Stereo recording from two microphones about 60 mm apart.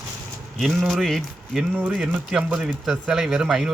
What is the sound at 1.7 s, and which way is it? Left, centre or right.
Speech, right.